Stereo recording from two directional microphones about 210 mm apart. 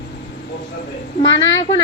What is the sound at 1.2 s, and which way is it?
Speech, 60° left (ahead or behind).